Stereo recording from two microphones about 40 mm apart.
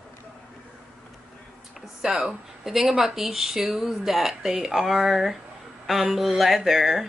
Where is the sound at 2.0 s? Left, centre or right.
Centre.